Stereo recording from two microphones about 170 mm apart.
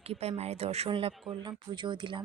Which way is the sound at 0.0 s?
35° right (ahead or behind).